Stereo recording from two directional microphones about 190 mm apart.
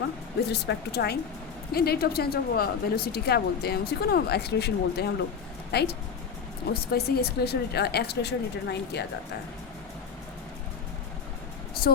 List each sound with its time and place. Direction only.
0.5 s speech: 60° left (ahead or behind)
11.8 s speech: 55° left (ahead or behind)